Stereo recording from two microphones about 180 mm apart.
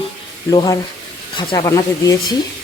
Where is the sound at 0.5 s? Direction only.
25° left (ahead or behind).